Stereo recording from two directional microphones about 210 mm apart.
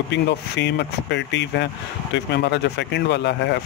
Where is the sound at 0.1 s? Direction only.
55° left (ahead or behind).